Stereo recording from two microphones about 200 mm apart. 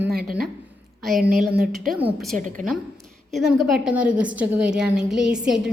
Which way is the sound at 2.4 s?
40° right (ahead or behind).